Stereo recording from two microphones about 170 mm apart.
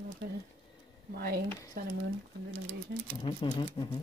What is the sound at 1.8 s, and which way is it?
Speech, 55° right (ahead or behind).